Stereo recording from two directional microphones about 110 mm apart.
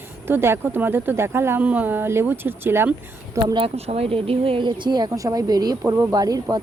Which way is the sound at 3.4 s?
45° right (ahead or behind).